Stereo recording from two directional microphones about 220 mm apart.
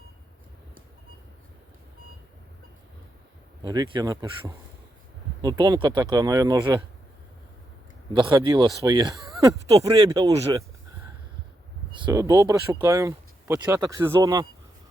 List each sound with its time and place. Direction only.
3.6 s speech: 20° right (ahead or behind)
8.1 s speech: 20° right (ahead or behind)
12.0 s speech: 15° right (ahead or behind)